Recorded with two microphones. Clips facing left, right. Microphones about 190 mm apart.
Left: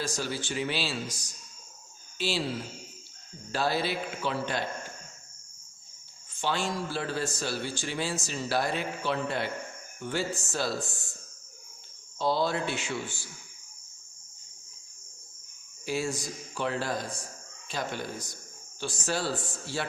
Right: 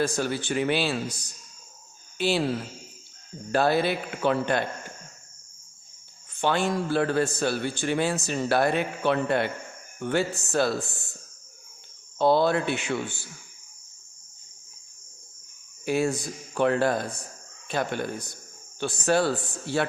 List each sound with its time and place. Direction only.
0.0 s a man's voice: 55° right (ahead or behind)
3.5 s a man's voice: 55° right (ahead or behind)
6.4 s a man's voice: 55° right (ahead or behind)
12.2 s a man's voice: 60° right (ahead or behind)
15.9 s a man's voice: 60° right (ahead or behind)